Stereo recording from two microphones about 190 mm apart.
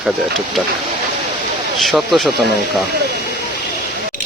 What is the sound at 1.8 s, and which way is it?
Speech, centre (ahead or behind).